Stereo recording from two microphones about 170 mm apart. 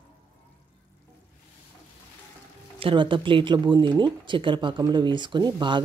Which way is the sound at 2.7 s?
30° right (ahead or behind).